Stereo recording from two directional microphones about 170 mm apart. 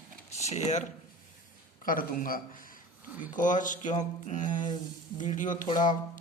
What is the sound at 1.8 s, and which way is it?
A man's voice, 55° left (ahead or behind).